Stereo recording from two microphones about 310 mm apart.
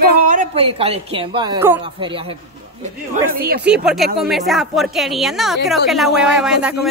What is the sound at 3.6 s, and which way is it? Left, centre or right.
Speech, centre.